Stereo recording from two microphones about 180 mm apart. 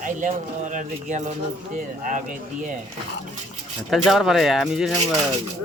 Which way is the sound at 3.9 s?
Centre (ahead or behind).